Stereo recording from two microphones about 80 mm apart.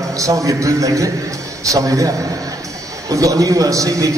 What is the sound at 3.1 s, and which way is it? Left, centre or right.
A man's voice, right.